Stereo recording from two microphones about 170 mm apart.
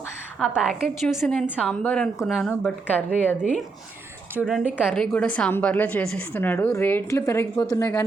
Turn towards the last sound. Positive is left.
turn(degrees=20)  # may be behind; listen again after turning